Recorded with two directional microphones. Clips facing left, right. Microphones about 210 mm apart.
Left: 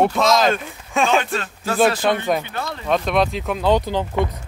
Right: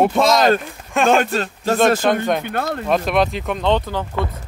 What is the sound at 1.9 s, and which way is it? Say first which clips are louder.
Speech: right 2 dB; 50° right (ahead or behind).